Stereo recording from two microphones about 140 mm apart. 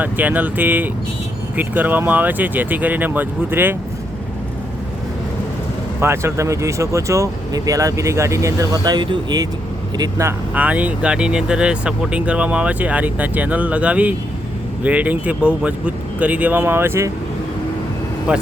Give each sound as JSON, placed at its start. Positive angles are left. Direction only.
{"t": 0.0, "sound": "speech", "side_deg": -10}
{"t": 6.0, "sound": "speech", "side_deg": -20}
{"t": 10.5, "sound": "speech", "side_deg": -10}